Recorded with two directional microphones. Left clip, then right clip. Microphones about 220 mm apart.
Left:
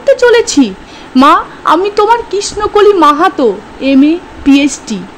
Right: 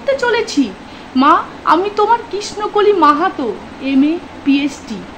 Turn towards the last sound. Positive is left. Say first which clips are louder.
# left 7 dB
turn(degrees=35)  # may be behind; listen again after turning